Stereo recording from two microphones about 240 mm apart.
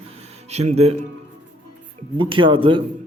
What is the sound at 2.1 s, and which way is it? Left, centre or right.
Speech, right.